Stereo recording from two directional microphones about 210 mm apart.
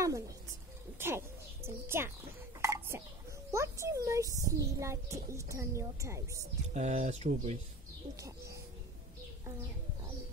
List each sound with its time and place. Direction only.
0.9 s a woman's voice: 10° right (ahead or behind)
2.6 s a sound: 15° right (ahead or behind)
3.5 s a child's voice: 15° right (ahead or behind)
6.7 s speech: 35° right (ahead or behind)